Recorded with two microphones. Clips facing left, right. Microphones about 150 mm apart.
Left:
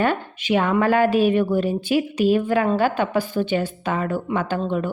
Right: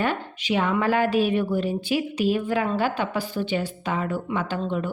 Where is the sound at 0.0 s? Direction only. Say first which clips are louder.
Left 4 dB; 55° left (ahead or behind).